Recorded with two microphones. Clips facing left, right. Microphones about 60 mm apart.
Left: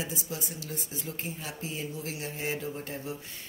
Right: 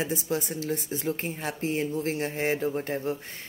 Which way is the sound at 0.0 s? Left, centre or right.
Right.